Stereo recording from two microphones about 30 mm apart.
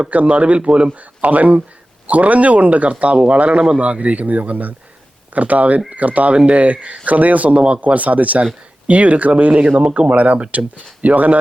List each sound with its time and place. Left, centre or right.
0.1 s speech: right
0.9 s speech: right
2.9 s speech: right
6.3 s speech: right
6.6 s speech: right
7.5 s speech: right
7.9 s speech: right